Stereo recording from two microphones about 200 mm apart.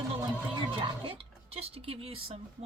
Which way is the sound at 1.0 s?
30° right (ahead or behind).